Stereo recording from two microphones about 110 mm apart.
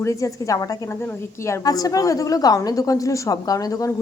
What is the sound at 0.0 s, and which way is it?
A woman's voice, 30° left (ahead or behind).